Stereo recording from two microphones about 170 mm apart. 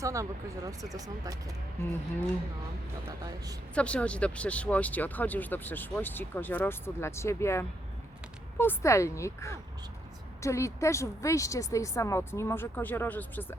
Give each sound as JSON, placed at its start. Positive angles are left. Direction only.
{"t": 0.0, "sound": "speech", "side_deg": -20}
{"t": 3.1, "sound": "speech", "side_deg": -20}
{"t": 3.8, "sound": "speech", "side_deg": 5}